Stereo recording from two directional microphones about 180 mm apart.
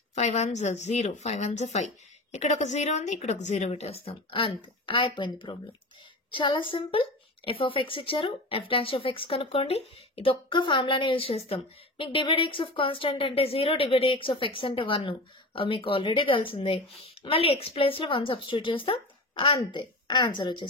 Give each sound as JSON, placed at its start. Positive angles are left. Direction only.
{"t": 0.1, "sound": "a woman's voice", "side_deg": 40}